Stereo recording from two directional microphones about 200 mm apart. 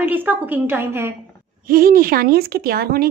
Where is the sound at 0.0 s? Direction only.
10° right (ahead or behind).